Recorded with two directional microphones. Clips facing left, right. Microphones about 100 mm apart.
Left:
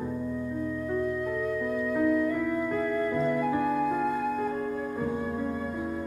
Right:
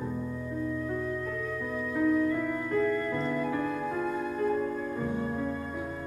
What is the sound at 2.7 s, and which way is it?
Music, 10° left (ahead or behind).